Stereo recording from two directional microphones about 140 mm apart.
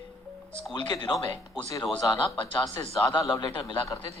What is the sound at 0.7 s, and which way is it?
Speech, 35° left (ahead or behind).